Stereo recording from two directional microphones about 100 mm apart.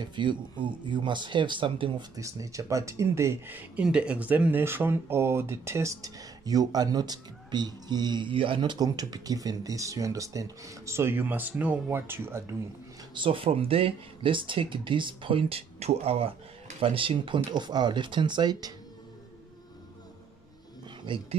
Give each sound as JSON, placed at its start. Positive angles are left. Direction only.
{"t": 0.0, "sound": "speech", "side_deg": -50}
{"t": 2.1, "sound": "speech", "side_deg": -35}
{"t": 13.1, "sound": "speech", "side_deg": -60}
{"t": 16.8, "sound": "speech", "side_deg": -60}
{"t": 21.0, "sound": "speech", "side_deg": -55}